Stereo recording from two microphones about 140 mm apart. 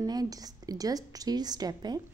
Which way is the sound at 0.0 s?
25° right (ahead or behind).